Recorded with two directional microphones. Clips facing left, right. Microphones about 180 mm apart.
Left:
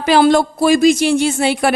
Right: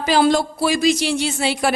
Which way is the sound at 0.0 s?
65° left (ahead or behind).